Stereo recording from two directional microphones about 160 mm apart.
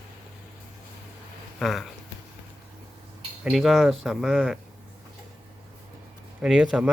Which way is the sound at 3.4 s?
Centre (ahead or behind).